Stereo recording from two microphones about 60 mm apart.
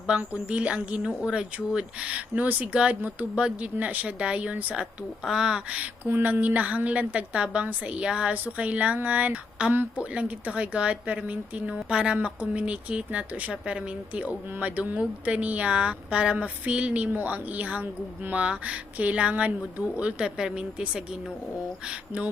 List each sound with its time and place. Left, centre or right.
0.1 s a woman's voice: right
6.1 s a woman's voice: right; by 21.0 s centre